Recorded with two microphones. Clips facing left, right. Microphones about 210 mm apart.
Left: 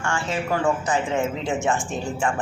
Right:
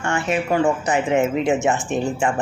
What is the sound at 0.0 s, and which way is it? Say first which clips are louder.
A woman's voice: right 4 dB; 20° right (ahead or behind).